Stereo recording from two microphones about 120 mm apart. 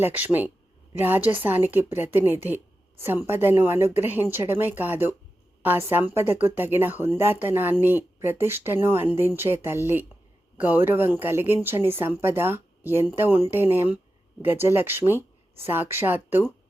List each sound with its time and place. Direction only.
0.0 s speech: 15° right (ahead or behind)